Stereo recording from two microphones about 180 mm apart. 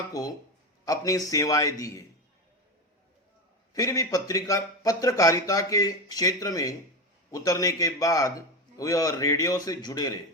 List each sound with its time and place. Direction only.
0.1 s speech: 20° left (ahead or behind)
3.8 s speech: 20° left (ahead or behind)